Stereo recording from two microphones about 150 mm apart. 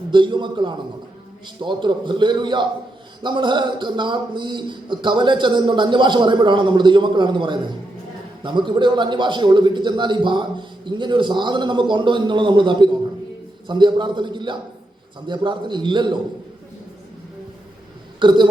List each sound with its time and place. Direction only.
0.1 s a man's voice: 30° right (ahead or behind)
18.2 s a man's voice: 30° right (ahead or behind)